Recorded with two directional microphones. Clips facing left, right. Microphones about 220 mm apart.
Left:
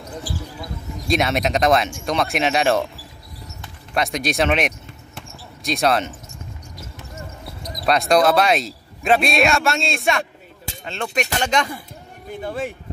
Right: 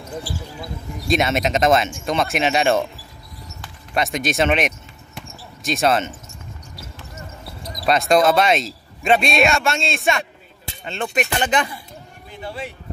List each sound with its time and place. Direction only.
1.0 s speech: centre (ahead or behind)
3.9 s basketball bounce: centre (ahead or behind)
7.8 s speech: centre (ahead or behind)
12.3 s speech: 50° left (ahead or behind)